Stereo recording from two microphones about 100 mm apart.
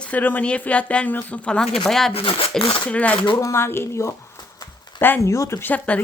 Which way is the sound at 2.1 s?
70° left (ahead or behind).